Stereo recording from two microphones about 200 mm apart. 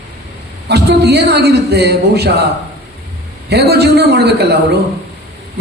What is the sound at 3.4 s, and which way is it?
A man's voice, 55° right (ahead or behind).